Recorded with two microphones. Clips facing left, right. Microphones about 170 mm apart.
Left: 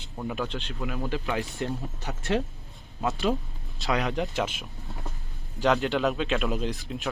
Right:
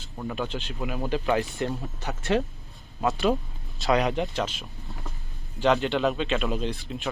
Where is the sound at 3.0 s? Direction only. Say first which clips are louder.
Right 3 dB; 75° right (ahead or behind).